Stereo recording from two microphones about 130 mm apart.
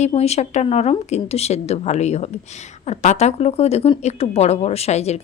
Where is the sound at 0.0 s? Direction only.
55° left (ahead or behind).